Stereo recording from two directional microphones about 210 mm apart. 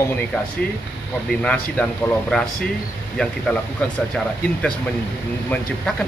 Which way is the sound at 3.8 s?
5° left (ahead or behind).